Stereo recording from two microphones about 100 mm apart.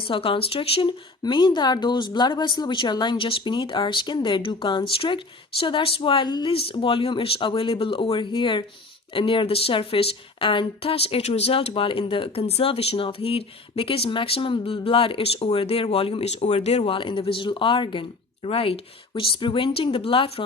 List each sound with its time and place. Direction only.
0.0 s speech: 65° left (ahead or behind)
1.2 s speech: 50° left (ahead or behind)
6.5 s speech: 70° left (ahead or behind)
18.4 s speech: 75° left (ahead or behind)